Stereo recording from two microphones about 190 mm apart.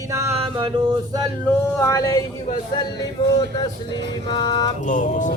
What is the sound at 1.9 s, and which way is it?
Music, 20° left (ahead or behind).